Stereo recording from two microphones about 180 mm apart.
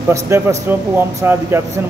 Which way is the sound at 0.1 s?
15° right (ahead or behind).